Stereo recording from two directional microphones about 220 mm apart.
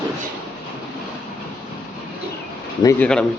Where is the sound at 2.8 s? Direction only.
10° left (ahead or behind).